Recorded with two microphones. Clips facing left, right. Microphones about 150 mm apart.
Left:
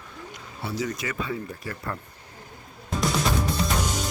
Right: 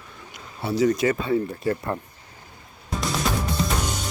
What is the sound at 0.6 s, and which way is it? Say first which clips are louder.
Speech: right 10 dB; 30° right (ahead or behind).